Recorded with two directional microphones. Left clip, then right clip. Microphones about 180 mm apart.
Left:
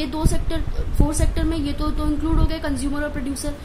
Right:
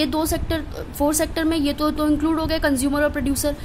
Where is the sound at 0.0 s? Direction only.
50° right (ahead or behind).